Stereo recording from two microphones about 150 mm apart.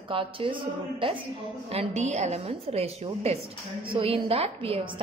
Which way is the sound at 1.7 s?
45° right (ahead or behind).